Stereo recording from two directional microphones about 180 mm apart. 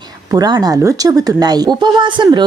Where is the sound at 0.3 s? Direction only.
20° right (ahead or behind).